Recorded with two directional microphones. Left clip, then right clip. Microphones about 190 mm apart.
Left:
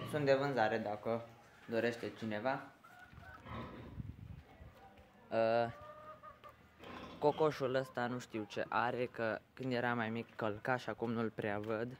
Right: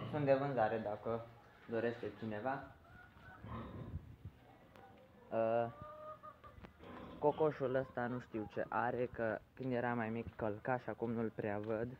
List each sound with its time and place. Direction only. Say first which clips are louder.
0.1 s speech: left 2 dB; 25° left (ahead or behind)
5.3 s speech: left 3 dB; 30° left (ahead or behind)
7.2 s speech: left 2 dB; 30° left (ahead or behind)